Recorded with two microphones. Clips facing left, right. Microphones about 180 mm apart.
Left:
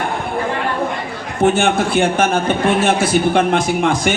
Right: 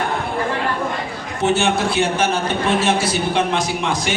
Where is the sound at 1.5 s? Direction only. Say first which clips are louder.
Left 3 dB; 55° left (ahead or behind).